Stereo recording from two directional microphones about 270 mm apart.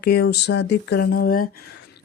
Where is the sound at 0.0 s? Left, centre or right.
Left.